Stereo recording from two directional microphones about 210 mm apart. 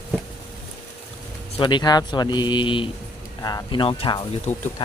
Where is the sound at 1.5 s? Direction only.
20° left (ahead or behind).